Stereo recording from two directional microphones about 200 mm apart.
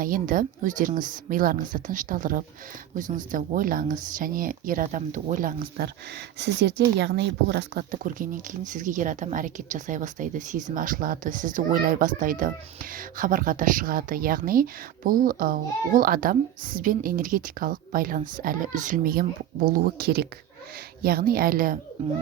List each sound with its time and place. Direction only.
0.0 s speech: 45° right (ahead or behind)
6.4 s a child's voice: 60° right (ahead or behind); by 21.8 s 45° right (ahead or behind)